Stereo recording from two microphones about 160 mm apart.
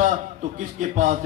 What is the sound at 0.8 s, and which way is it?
Speech, 50° right (ahead or behind).